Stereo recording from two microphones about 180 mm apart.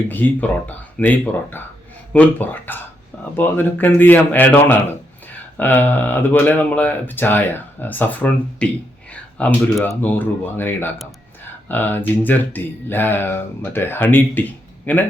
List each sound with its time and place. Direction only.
0.1 s speech: 10° left (ahead or behind)